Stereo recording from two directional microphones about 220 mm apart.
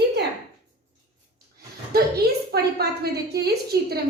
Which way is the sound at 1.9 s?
45° right (ahead or behind).